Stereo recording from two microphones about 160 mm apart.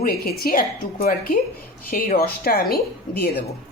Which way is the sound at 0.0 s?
75° left (ahead or behind).